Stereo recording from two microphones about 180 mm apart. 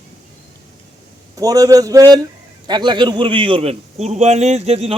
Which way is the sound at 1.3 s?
20° right (ahead or behind).